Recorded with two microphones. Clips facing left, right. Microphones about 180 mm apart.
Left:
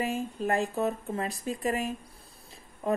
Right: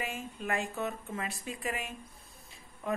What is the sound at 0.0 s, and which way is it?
Speech, 35° left (ahead or behind).